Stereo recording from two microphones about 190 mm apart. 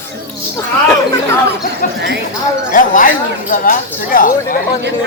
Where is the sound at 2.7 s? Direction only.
45° left (ahead or behind).